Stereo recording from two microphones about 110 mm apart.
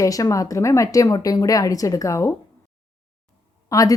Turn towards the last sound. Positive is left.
turn(degrees=30)  # may be behind; listen again after turning